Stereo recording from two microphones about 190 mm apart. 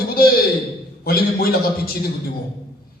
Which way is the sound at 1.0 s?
50° left (ahead or behind).